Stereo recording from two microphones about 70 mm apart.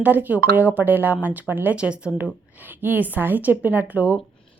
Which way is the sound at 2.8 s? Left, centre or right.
Right.